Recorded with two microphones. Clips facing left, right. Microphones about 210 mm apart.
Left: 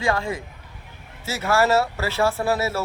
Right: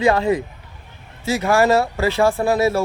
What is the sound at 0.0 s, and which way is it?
Speech, 20° right (ahead or behind).